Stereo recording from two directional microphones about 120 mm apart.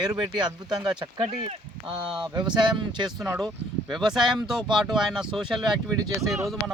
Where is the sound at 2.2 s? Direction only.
40° right (ahead or behind).